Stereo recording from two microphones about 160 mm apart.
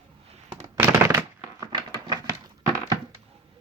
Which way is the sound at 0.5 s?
15° right (ahead or behind).